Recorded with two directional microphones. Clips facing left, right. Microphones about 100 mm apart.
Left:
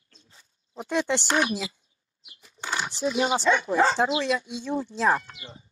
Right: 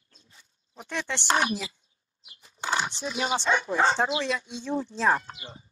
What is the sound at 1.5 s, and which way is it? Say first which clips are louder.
Speech: left 1 dB; 25° left (ahead or behind).